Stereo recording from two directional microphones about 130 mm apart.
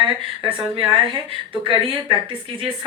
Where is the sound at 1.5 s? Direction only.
40° right (ahead or behind).